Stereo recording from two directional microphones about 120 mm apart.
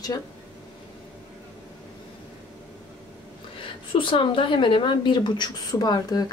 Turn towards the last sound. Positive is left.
turn(degrees=35)  # may be behind; listen again after turning